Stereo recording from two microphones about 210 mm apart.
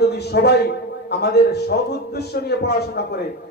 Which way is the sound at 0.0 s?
50° left (ahead or behind).